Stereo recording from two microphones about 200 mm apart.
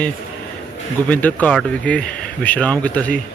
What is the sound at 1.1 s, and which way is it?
Speech, 10° left (ahead or behind).